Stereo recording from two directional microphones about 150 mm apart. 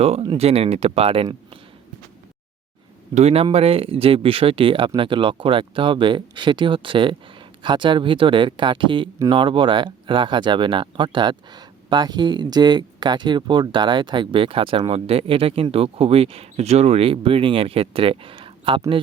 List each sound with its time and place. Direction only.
0.2 s speech: 40° right (ahead or behind)
3.2 s speech: 45° right (ahead or behind)